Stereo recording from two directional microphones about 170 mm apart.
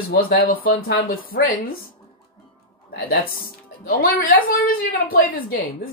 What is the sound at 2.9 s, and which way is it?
A woman's voice, 65° left (ahead or behind).